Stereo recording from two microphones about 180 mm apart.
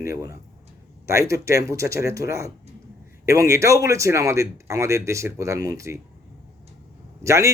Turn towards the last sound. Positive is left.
turn(degrees=-15)  # may be behind; listen again after turning